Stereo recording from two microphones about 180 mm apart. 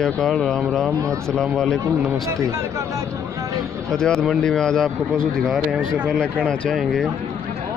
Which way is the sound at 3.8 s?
5° left (ahead or behind).